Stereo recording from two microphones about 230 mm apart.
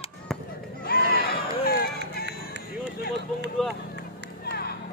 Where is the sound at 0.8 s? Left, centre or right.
Left.